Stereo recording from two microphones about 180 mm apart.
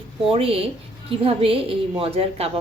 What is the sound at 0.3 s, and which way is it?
A woman's voice, 30° right (ahead or behind).